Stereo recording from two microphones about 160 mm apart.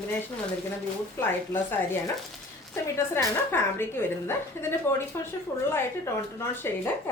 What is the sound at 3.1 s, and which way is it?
A woman's voice, 15° left (ahead or behind).